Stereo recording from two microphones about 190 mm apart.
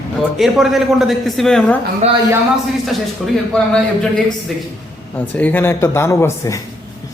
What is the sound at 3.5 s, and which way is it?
Speech, 5° left (ahead or behind).